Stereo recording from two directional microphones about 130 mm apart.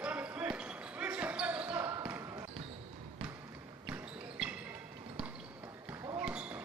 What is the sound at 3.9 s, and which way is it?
Basketball bounce, 10° right (ahead or behind).